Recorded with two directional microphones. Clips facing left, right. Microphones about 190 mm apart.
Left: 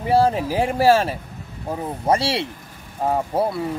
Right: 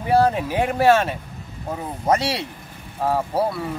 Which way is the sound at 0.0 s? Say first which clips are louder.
Even; 30° left (ahead or behind).